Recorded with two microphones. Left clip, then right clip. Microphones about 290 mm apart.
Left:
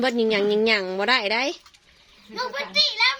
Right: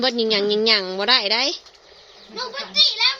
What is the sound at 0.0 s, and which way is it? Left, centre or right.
A woman's voice, centre.